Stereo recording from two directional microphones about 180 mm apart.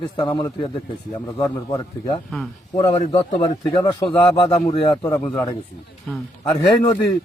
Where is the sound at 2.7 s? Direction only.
35° left (ahead or behind); by 5.2 s 20° left (ahead or behind).